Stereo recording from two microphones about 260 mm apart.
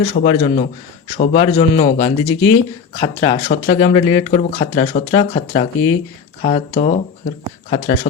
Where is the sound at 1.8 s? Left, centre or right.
Left.